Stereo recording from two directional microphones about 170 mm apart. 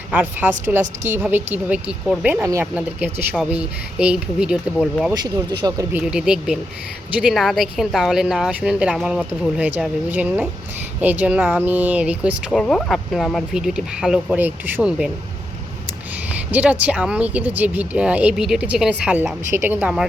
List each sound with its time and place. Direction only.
0.1 s speech: 10° right (ahead or behind)
5.2 s speech: 25° right (ahead or behind)
6.1 s speech: 5° right (ahead or behind)
12.5 s speech: 5° left (ahead or behind)
16.5 s speech: 10° right (ahead or behind)